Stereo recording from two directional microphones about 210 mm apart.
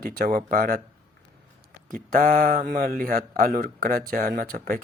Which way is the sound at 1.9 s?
40° right (ahead or behind).